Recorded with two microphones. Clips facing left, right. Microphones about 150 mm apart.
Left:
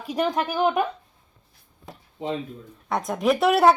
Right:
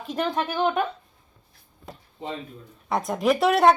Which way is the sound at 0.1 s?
10° left (ahead or behind).